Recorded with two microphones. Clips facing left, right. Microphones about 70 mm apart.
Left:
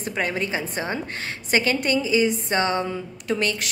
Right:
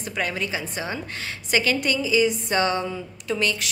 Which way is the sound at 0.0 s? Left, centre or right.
Left.